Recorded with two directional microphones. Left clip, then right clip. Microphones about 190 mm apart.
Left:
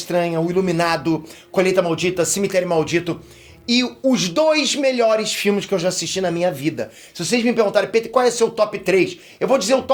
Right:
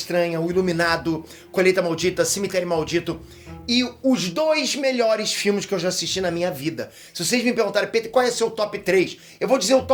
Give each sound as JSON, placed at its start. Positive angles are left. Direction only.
{"t": 0.1, "sound": "speech", "side_deg": 35}
{"t": 3.7, "sound": "speech", "side_deg": 50}
{"t": 4.4, "sound": "speech", "side_deg": 25}